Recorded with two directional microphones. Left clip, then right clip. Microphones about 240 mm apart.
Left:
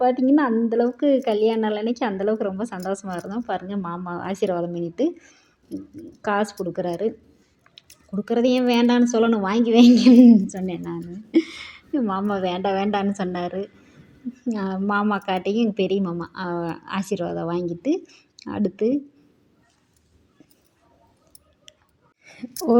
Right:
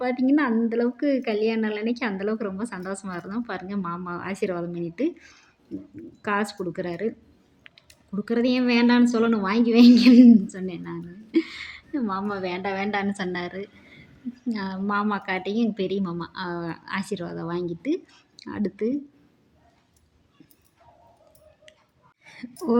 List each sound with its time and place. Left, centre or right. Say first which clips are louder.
0.0 s a woman's voice: left 4 dB; centre